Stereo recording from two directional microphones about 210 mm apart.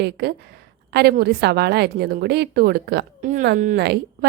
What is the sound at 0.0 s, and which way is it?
A woman's voice, 50° right (ahead or behind).